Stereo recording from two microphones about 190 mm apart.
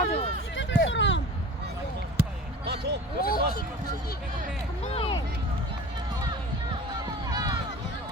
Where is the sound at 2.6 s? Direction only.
60° right (ahead or behind).